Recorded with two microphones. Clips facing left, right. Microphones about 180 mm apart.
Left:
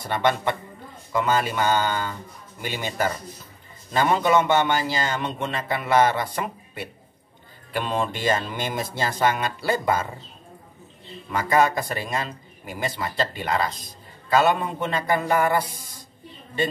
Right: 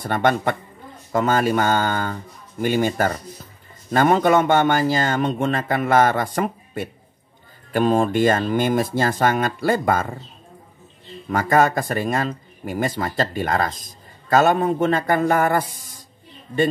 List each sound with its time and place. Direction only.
0.0 s speech: 50° right (ahead or behind)
11.2 s speech: 50° right (ahead or behind)